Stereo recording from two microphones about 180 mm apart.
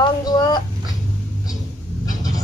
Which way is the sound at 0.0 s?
20° left (ahead or behind).